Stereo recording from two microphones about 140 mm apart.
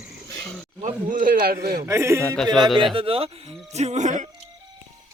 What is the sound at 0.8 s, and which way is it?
A man's voice, 70° right (ahead or behind).